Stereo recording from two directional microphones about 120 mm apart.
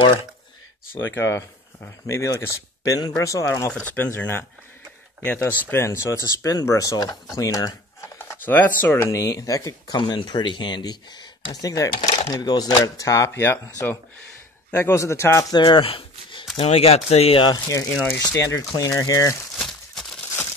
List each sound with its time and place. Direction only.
1.1 s speech: 20° left (ahead or behind)
8.2 s speech: 20° left (ahead or behind)
15.5 s a sound: 45° left (ahead or behind)
16.5 s speech: 55° left (ahead or behind)
17.8 s speech: 15° left (ahead or behind)